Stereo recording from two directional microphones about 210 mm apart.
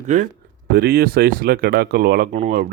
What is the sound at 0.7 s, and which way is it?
Speech, 45° right (ahead or behind).